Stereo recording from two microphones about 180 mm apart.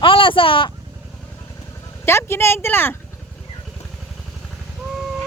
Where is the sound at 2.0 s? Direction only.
15° left (ahead or behind).